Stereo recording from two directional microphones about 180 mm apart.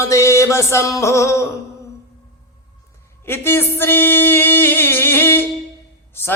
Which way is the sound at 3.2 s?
10° left (ahead or behind).